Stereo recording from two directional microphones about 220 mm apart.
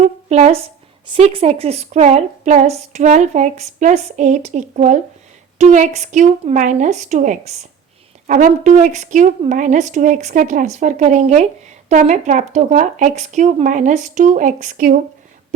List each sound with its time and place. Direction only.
0.3 s a woman's voice: 30° right (ahead or behind)